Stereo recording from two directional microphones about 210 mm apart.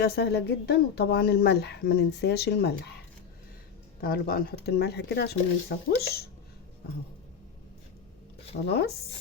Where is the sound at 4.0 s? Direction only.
45° left (ahead or behind).